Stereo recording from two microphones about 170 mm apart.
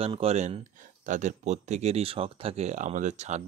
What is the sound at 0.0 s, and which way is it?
Speech, 35° right (ahead or behind).